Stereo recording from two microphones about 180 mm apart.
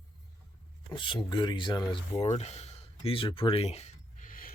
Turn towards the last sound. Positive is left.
turn(degrees=50)  # may be behind; listen again after turning